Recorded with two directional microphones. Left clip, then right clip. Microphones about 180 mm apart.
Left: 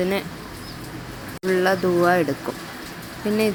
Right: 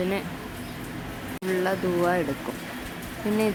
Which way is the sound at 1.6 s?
15° left (ahead or behind).